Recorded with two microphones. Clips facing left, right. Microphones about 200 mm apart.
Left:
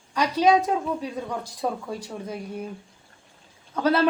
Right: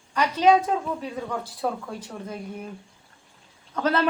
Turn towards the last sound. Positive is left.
turn(degrees=10)  # may be behind; listen again after turning